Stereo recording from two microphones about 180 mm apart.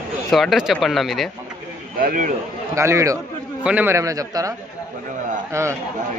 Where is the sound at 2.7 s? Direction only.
15° right (ahead or behind).